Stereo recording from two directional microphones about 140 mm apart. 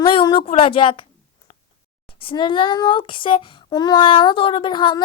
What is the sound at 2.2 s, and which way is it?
Speech, 35° left (ahead or behind).